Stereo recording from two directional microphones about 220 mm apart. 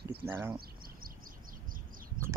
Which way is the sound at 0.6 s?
40° right (ahead or behind).